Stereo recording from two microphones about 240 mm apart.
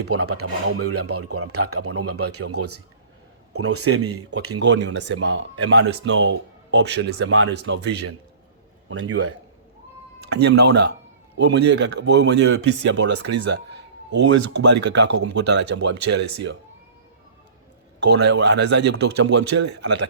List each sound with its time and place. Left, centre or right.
0.0 s speech: right
8.9 s speech: right
10.2 s speech: right
14.1 s speech: right
18.0 s speech: right